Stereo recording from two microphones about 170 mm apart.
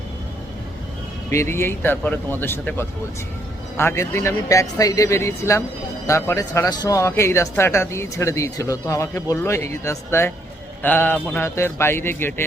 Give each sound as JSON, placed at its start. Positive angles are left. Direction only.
{"t": 1.3, "sound": "speech", "side_deg": 15}